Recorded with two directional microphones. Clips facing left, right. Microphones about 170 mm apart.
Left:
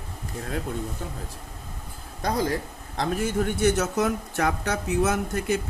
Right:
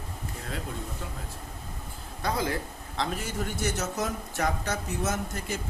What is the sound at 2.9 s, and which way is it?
A man's voice, 50° left (ahead or behind).